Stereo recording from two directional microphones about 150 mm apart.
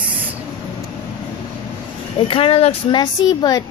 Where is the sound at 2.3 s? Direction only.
40° left (ahead or behind).